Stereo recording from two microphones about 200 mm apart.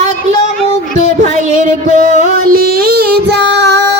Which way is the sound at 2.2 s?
50° right (ahead or behind).